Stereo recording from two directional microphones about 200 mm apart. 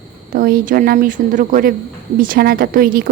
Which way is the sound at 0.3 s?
45° right (ahead or behind).